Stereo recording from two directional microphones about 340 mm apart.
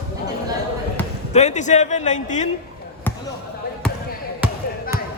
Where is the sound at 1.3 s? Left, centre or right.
Centre.